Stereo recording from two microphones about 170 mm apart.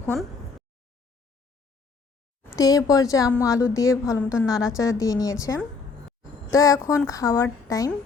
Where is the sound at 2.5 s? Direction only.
20° left (ahead or behind).